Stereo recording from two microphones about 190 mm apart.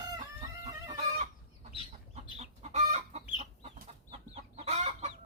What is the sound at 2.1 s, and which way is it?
Chicken, 35° right (ahead or behind).